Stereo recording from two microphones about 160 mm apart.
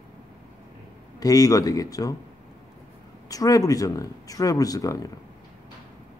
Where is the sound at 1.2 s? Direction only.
20° left (ahead or behind).